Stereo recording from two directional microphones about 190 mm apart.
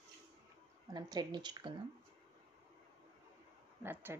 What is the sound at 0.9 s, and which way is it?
Speech, 20° right (ahead or behind).